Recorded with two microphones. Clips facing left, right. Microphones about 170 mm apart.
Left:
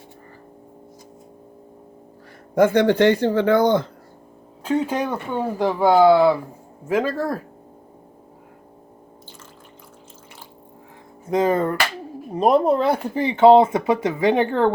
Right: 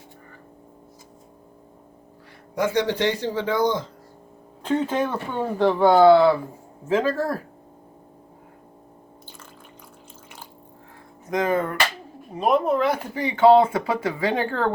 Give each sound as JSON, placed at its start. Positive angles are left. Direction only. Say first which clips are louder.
{"t": 2.6, "sound": "speech", "louder": "left 7 dB", "side_deg": 55}
{"t": 4.6, "sound": "speech", "louder": "left 1 dB", "side_deg": 10}
{"t": 11.3, "sound": "music", "louder": "left 4 dB", "side_deg": 30}
{"t": 12.4, "sound": "speech", "louder": "left 3 dB", "side_deg": 35}